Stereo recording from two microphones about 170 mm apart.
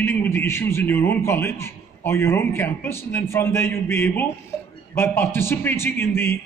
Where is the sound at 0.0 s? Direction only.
15° left (ahead or behind).